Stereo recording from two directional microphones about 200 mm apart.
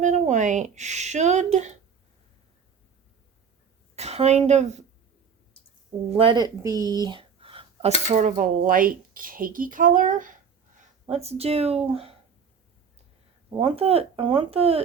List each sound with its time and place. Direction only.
0.0 s speech: 35° right (ahead or behind)
3.9 s a woman's voice: 30° right (ahead or behind)
6.1 s speech: 25° right (ahead or behind)
8.1 s speech: 40° right (ahead or behind)
13.6 s speech: 30° right (ahead or behind)